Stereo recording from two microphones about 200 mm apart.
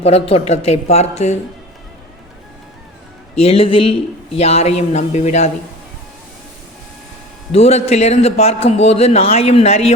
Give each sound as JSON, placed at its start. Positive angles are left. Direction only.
{"t": 0.0, "sound": "speech", "side_deg": 30}
{"t": 3.3, "sound": "speech", "side_deg": 30}
{"t": 7.5, "sound": "speech", "side_deg": 30}